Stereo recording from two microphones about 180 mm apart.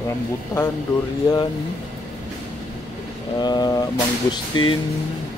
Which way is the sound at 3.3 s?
25° left (ahead or behind).